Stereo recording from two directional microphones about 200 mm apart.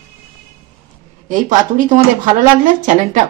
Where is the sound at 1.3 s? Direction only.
40° right (ahead or behind).